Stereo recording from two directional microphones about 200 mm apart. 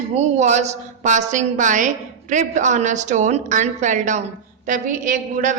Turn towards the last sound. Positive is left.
turn(degrees=-40)  # may be behind; listen again after turning